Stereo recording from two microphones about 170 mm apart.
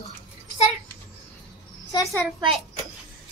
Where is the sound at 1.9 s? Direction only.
25° left (ahead or behind).